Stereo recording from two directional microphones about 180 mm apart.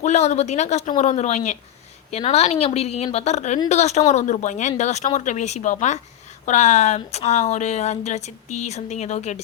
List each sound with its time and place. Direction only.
0.0 s speech: 40° left (ahead or behind)